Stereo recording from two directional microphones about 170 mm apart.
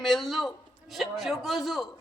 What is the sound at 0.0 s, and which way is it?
A man's voice, centre (ahead or behind).